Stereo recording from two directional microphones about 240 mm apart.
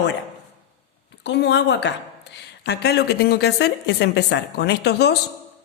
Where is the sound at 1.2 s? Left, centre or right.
Left.